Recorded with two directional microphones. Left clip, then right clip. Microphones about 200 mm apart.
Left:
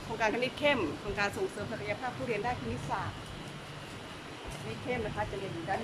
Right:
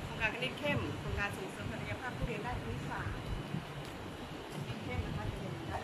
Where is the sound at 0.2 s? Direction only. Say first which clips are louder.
Left 6 dB; 20° left (ahead or behind).